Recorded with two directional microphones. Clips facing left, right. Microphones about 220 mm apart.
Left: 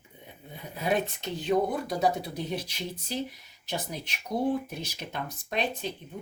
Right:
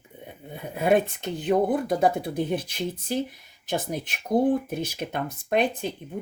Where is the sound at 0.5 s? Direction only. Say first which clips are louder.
Right 7 dB; 55° right (ahead or behind).